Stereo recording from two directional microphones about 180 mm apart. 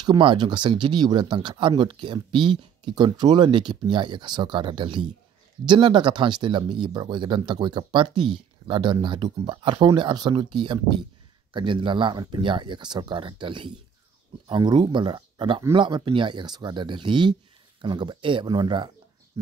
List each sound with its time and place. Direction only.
0.0 s speech: 25° right (ahead or behind)